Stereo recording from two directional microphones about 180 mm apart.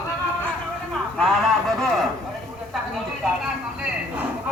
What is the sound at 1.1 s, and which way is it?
Speech, centre (ahead or behind).